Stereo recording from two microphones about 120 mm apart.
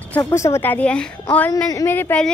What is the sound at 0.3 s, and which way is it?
A woman's voice, 20° left (ahead or behind).